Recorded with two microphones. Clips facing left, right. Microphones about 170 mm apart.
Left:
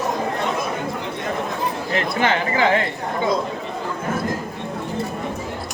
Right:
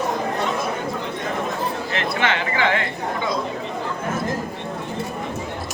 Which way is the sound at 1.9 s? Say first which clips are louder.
Left 4 dB; 35° left (ahead or behind).